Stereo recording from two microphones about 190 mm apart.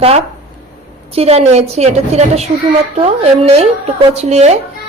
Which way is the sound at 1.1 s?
30° right (ahead or behind).